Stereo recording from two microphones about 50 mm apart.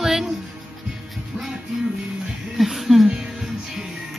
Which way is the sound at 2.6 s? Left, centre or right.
Centre.